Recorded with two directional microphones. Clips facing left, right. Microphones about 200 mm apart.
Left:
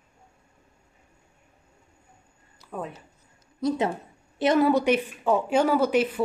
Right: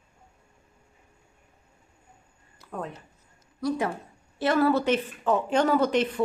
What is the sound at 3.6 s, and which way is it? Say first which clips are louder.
Speech: left 2 dB; 20° left (ahead or behind).